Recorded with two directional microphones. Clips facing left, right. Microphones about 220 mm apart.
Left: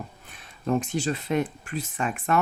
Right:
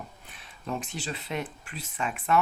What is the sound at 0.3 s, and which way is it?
Speech, 45° left (ahead or behind).